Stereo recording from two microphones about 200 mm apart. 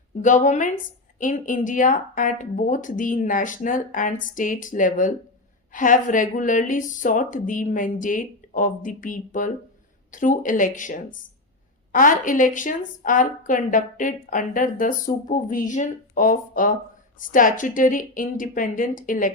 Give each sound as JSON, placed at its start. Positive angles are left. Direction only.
{"t": 0.2, "sound": "a woman's voice", "side_deg": 40}